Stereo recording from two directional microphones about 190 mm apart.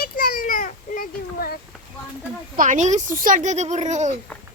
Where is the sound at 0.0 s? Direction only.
50° left (ahead or behind).